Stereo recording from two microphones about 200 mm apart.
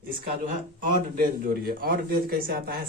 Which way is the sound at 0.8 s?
45° right (ahead or behind).